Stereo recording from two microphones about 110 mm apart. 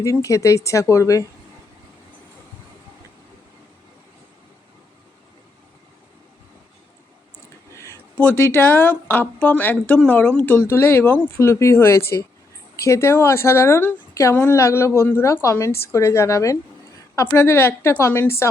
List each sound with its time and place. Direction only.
0.0 s a woman's voice: 30° left (ahead or behind)
7.3 s a sound: 25° left (ahead or behind)
8.2 s a woman's voice: 20° left (ahead or behind)